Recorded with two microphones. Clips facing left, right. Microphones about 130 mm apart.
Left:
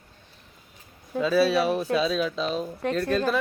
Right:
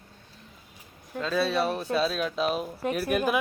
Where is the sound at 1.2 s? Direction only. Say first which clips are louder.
Left 5 dB; 5° left (ahead or behind); by 3.3 s 15° right (ahead or behind).